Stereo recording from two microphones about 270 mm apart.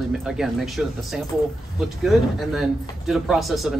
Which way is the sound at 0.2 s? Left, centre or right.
Centre.